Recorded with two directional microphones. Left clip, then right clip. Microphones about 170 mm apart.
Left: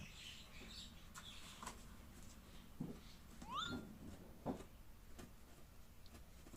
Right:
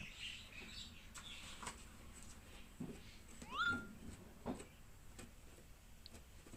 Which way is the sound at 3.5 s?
40° left (ahead or behind).